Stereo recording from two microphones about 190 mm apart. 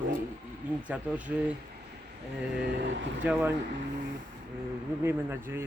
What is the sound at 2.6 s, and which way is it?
Speech, 70° right (ahead or behind).